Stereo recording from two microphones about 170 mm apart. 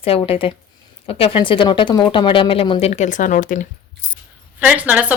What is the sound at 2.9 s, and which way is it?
Speech, 45° left (ahead or behind).